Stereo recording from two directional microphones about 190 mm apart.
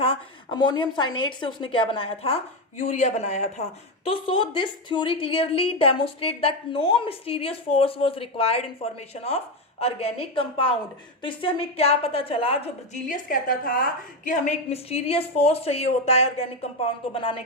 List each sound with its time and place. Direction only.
0.0 s a woman's voice: 25° left (ahead or behind)
13.1 s a woman's voice: 45° left (ahead or behind); by 17.4 s 30° left (ahead or behind)